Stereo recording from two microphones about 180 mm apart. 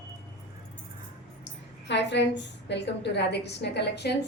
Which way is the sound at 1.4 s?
75° left (ahead or behind).